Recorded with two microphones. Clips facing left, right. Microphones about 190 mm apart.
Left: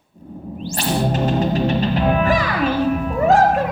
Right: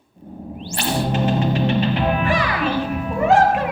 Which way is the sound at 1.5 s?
40° left (ahead or behind).